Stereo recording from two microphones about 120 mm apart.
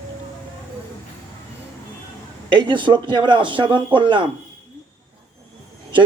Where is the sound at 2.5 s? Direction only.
40° right (ahead or behind).